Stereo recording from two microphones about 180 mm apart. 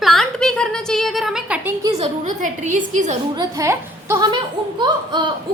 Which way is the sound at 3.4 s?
20° right (ahead or behind).